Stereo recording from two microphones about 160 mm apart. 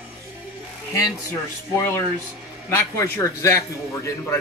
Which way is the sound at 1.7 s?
20° left (ahead or behind).